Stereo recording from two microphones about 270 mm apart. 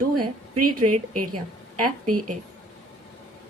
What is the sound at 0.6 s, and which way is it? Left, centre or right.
Speech, right.